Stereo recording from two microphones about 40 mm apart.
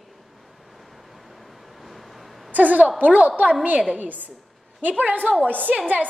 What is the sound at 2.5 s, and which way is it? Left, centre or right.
A woman's voice, right.